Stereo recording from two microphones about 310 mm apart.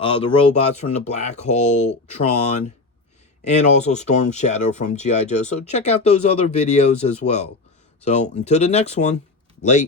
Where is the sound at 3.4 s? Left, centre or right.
Left.